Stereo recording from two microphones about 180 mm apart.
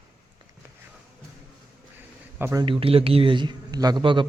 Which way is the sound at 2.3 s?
10° right (ahead or behind).